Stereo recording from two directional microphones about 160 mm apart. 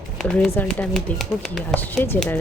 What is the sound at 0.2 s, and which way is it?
Speech, 5° left (ahead or behind).